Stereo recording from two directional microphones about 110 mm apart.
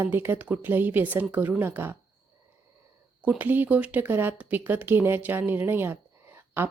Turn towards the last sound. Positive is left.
turn(degrees=-20)  # may be behind; listen again after turning